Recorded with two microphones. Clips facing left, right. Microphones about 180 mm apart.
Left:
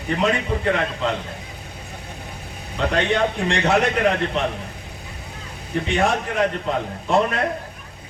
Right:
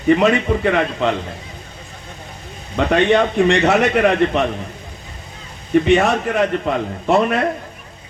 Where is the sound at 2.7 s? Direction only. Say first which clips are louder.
Right 6 dB; 65° right (ahead or behind).